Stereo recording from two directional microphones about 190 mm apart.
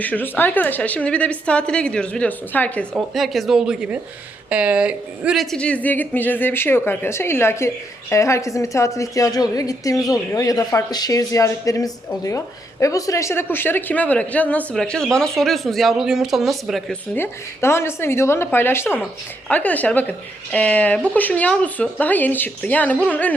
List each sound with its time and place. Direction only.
0.0 s a woman's voice: 10° left (ahead or behind)
17.2 s a woman's voice: 15° left (ahead or behind)